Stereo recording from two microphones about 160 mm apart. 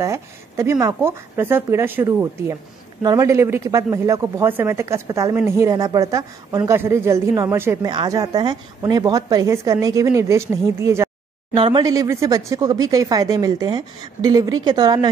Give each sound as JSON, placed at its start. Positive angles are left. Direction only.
{"t": 0.0, "sound": "speech", "side_deg": -20}
{"t": 11.5, "sound": "speech", "side_deg": -30}